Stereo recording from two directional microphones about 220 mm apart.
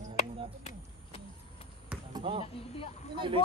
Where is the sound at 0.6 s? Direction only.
25° left (ahead or behind).